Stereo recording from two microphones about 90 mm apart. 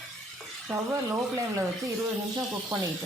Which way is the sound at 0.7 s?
35° right (ahead or behind).